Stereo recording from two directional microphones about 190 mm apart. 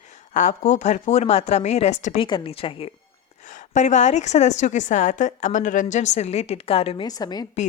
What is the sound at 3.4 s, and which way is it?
A woman's voice, 40° left (ahead or behind).